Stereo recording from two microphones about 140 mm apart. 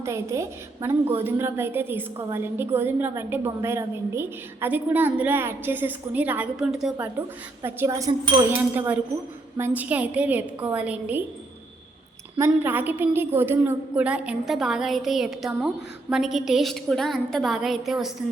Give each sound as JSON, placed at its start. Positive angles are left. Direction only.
{"t": 0.0, "sound": "a woman's voice", "side_deg": -20}
{"t": 12.5, "sound": "a woman's voice", "side_deg": -15}